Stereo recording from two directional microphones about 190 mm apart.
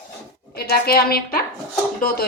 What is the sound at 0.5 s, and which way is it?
A woman's voice, 55° left (ahead or behind).